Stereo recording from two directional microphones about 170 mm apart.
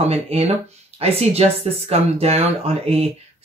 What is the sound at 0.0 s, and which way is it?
Speech, 40° right (ahead or behind).